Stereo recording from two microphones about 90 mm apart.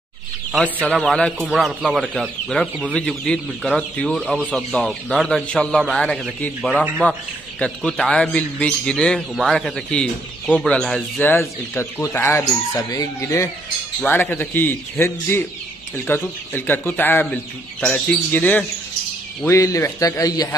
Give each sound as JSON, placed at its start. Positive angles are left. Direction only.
{"t": 0.9, "sound": "a man's voice", "side_deg": 10}
{"t": 11.1, "sound": "a man's voice", "side_deg": 20}
{"t": 12.9, "sound": "a man's voice", "side_deg": 40}
{"t": 14.0, "sound": "a man's voice", "side_deg": 20}
{"t": 19.4, "sound": "a man's voice", "side_deg": 35}